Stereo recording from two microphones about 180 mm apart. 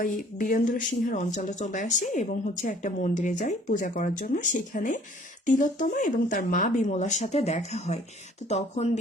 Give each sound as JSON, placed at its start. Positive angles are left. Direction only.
{"t": 0.0, "sound": "speech", "side_deg": 50}